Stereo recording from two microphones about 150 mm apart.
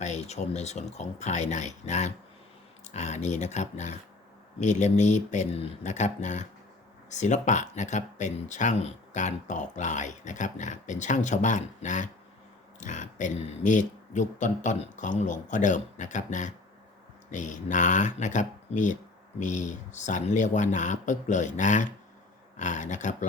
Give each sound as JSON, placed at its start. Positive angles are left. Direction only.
{"t": 0.0, "sound": "speech", "side_deg": 50}